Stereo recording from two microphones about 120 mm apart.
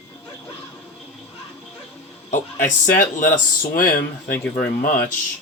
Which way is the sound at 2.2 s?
90° left.